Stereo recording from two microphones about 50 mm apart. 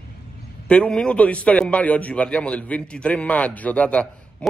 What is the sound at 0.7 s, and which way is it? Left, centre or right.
A man's voice, left.